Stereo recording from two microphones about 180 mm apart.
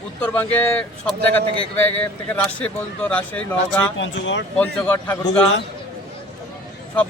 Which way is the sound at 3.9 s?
90° left.